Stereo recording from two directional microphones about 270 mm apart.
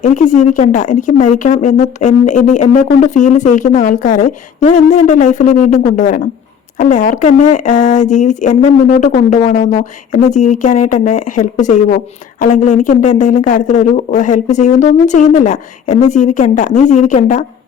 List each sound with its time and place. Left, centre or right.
0.0 s speech: left